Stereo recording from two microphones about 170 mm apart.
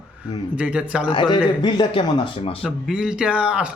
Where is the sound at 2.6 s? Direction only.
5° right (ahead or behind).